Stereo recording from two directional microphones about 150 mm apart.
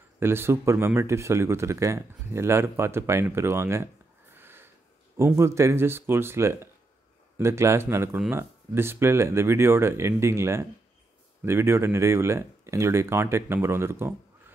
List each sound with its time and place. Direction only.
0.2 s speech: 15° right (ahead or behind)